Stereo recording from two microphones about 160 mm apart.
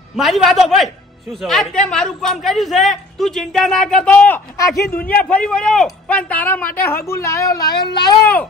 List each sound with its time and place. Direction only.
0.1 s a woman's voice: centre (ahead or behind); by 8.2 s 25° left (ahead or behind)